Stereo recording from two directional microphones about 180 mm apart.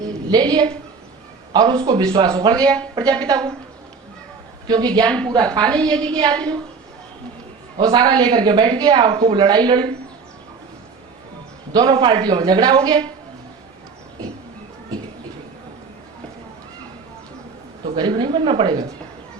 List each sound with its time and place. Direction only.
0.3 s a woman's voice: 20° right (ahead or behind)
4.7 s a woman's voice: 25° right (ahead or behind)
7.8 s a woman's voice: 25° right (ahead or behind)
11.7 s a woman's voice: 25° right (ahead or behind)
17.9 s a woman's voice: 25° right (ahead or behind)